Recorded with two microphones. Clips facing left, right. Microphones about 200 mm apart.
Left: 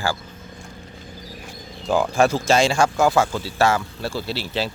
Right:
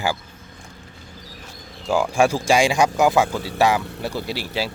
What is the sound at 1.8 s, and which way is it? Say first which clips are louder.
Speech: even; 10° right (ahead or behind).